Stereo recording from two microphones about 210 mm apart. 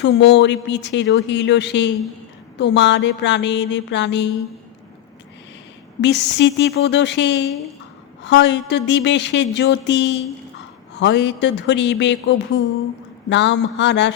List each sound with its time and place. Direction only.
0.0 s speech: 55° left (ahead or behind)
6.0 s speech: 55° left (ahead or behind)